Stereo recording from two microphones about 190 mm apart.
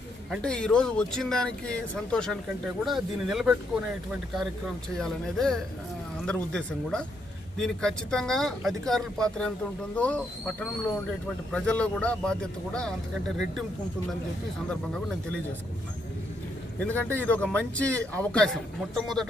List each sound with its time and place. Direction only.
0.3 s speech: 5° left (ahead or behind)
4.9 s speech: centre (ahead or behind)
16.8 s a man's voice: 10° left (ahead or behind)